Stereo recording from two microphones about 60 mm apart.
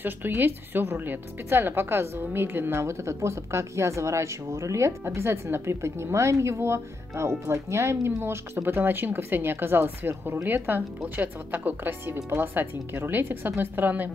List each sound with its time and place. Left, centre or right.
0.0 s a woman's voice: right
2.8 s speech: right
5.0 s a woman's voice: right